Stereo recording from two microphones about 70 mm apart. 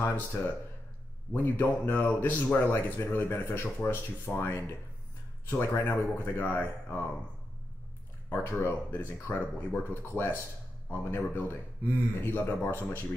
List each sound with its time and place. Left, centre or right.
0.0 s speech: left
8.3 s speech: left